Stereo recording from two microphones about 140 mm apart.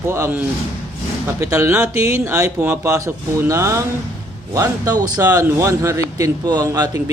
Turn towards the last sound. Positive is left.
turn(degrees=-25)  # may be behind; listen again after turning